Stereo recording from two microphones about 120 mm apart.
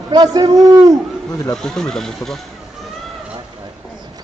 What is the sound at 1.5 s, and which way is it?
Speech, 5° left (ahead or behind).